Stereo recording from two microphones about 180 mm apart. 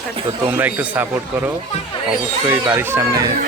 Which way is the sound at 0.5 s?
10° right (ahead or behind).